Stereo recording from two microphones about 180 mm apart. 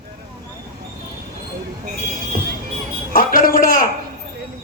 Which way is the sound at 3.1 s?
50° left (ahead or behind).